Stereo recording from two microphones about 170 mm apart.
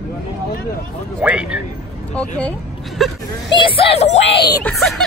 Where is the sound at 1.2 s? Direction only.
5° right (ahead or behind).